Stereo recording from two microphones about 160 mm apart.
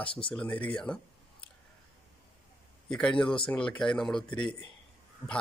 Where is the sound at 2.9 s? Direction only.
5° left (ahead or behind).